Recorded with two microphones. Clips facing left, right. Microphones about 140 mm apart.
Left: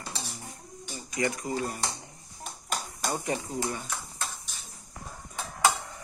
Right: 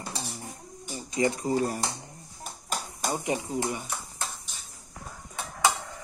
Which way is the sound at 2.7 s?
Centre (ahead or behind).